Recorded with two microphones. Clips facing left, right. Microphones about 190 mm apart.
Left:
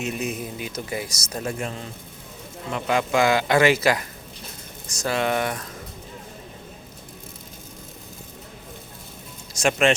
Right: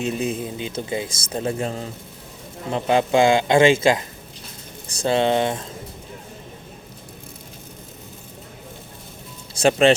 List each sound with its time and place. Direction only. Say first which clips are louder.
0.0 s a man's voice: right 4 dB; 30° right (ahead or behind)
9.6 s speech: right 4 dB; 30° right (ahead or behind)